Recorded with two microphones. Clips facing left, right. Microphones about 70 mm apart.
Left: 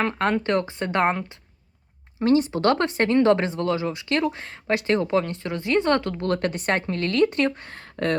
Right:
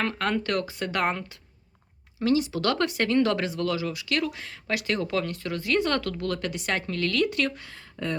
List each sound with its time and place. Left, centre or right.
0.0 s speech: left
2.1 s speech: left
6.2 s a woman's voice: left
7.7 s speech: left